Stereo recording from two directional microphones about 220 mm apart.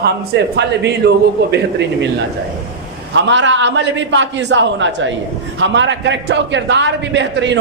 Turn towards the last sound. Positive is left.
turn(degrees=-55)  # may be behind; listen again after turning